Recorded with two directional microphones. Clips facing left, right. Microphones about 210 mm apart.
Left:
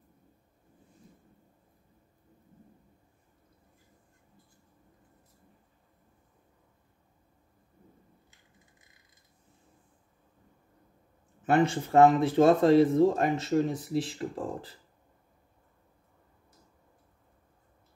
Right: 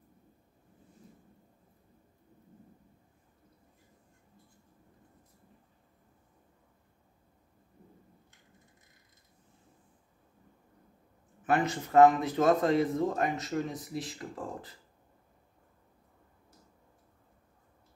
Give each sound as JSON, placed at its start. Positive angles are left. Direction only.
{"t": 11.4, "sound": "speech", "side_deg": 30}